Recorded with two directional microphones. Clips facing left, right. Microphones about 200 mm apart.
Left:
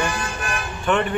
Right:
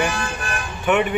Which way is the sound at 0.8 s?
10° right (ahead or behind).